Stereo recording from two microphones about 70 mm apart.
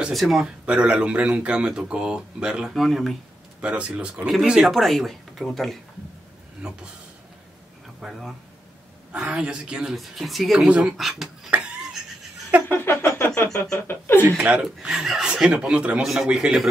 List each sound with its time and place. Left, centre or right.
0.1 s speech: centre
0.7 s speech: centre
3.6 s speech: centre
6.6 s speech: centre
8.0 s speech: centre
9.1 s speech: centre
9.9 s speech: centre
10.7 s speech: centre
11.0 s speech: centre
11.5 s a sound: right
12.6 s a sound: left
14.3 s speech: centre
16.0 s speech: centre